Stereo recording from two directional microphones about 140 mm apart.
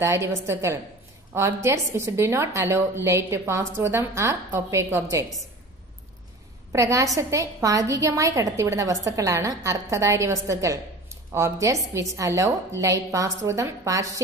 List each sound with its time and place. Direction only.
0.0 s a woman's voice: 20° right (ahead or behind)
6.7 s a woman's voice: 25° right (ahead or behind)